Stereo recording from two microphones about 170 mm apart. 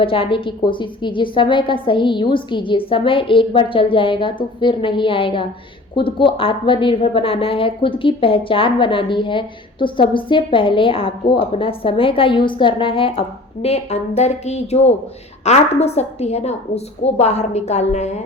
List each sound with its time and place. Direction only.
0.0 s a woman's voice: 30° left (ahead or behind)